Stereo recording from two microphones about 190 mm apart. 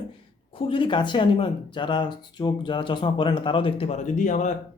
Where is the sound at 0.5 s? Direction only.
25° left (ahead or behind).